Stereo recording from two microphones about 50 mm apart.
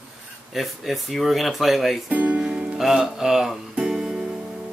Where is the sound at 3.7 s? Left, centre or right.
Centre.